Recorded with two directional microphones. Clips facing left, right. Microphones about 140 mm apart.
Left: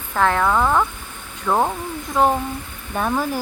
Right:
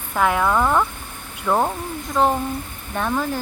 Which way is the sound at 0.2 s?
10° right (ahead or behind).